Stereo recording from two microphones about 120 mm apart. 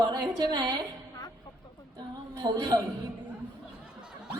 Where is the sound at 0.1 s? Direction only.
35° right (ahead or behind).